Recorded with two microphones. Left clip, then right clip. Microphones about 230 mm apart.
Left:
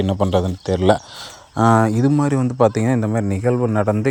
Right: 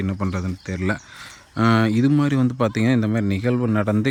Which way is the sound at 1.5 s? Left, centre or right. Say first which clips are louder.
Left 4 dB; centre.